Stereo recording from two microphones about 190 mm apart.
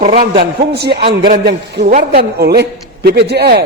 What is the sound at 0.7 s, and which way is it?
A man's voice, 60° right (ahead or behind).